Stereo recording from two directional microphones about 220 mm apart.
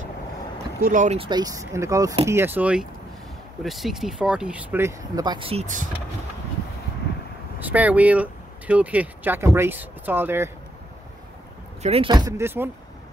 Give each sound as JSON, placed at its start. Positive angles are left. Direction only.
{"t": 0.7, "sound": "speech", "side_deg": -35}
{"t": 7.6, "sound": "speech", "side_deg": -5}
{"t": 11.8, "sound": "speech", "side_deg": -25}